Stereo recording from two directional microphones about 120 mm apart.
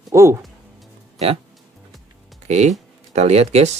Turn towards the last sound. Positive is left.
turn(degrees=-65)  # may be behind; listen again after turning